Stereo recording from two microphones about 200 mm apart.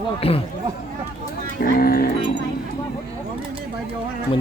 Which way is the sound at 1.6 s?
50° left (ahead or behind).